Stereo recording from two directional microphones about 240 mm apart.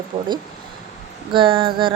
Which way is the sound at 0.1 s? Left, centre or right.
Right.